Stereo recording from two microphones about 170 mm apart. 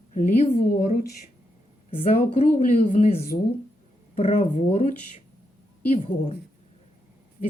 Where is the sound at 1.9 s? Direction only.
45° left (ahead or behind).